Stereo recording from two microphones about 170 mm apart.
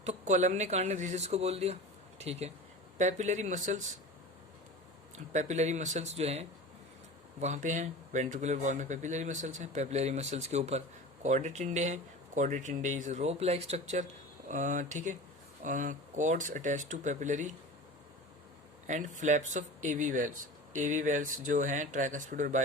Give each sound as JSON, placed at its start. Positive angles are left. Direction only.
{"t": 0.0, "sound": "speech", "side_deg": -40}
{"t": 5.3, "sound": "speech", "side_deg": -45}
{"t": 18.9, "sound": "speech", "side_deg": -45}